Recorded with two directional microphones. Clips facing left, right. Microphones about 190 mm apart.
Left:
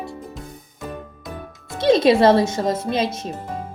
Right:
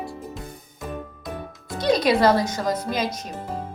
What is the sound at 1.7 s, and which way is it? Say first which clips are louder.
Speech: left 5 dB; 25° left (ahead or behind).